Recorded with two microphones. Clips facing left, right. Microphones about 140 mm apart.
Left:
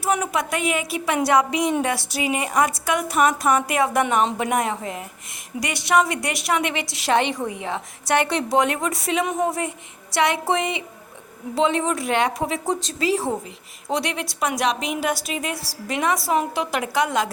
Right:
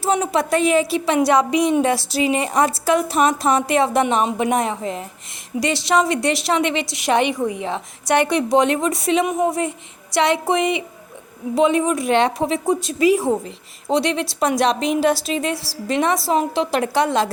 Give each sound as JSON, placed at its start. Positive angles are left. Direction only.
{"t": 0.0, "sound": "a woman's voice", "side_deg": -25}
{"t": 12.6, "sound": "a woman's voice", "side_deg": -10}